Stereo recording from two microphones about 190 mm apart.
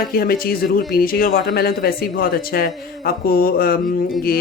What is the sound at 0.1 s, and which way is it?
Speech, 50° left (ahead or behind).